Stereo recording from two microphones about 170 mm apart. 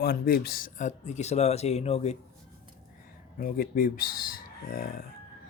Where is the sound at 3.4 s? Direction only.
60° left (ahead or behind).